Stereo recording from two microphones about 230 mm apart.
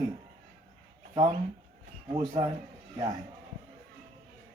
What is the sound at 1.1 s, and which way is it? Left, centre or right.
Speech, right.